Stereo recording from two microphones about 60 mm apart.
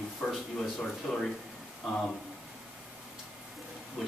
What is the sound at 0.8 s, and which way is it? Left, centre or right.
Speech, centre.